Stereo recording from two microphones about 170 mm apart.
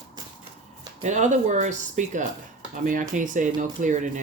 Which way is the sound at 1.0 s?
45° right (ahead or behind).